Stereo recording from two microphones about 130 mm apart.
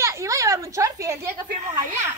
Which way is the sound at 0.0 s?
25° right (ahead or behind).